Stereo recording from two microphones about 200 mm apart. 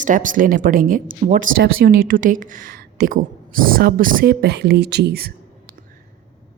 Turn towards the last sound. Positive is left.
turn(degrees=-55)  # may be behind; listen again after turning